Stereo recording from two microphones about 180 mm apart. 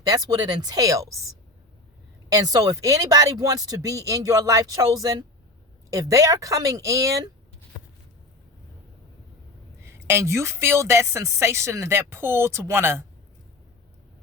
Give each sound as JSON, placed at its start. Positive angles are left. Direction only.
{"t": 0.1, "sound": "speech", "side_deg": -20}
{"t": 2.3, "sound": "speech", "side_deg": -20}
{"t": 9.8, "sound": "speech", "side_deg": -15}